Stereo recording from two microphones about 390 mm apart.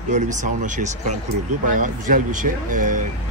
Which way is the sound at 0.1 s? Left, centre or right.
Centre.